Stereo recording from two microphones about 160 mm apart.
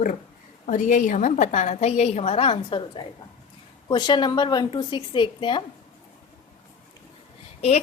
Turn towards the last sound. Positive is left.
turn(degrees=40)  # may be behind; listen again after turning